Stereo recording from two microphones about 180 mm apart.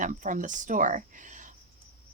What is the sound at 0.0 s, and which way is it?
Speech, 45° right (ahead or behind).